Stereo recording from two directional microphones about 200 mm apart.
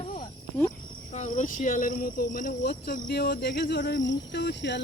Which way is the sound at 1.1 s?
35° left (ahead or behind).